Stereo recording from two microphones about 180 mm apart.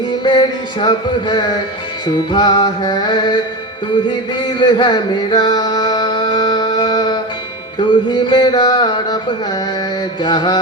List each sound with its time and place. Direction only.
0.1 s music: 25° left (ahead or behind)
10.2 s music: 25° left (ahead or behind)